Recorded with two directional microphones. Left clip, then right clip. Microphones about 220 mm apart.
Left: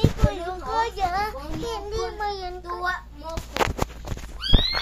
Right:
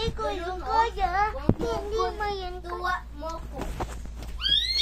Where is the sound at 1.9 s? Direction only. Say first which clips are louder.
Left 2 dB; 5° left (ahead or behind).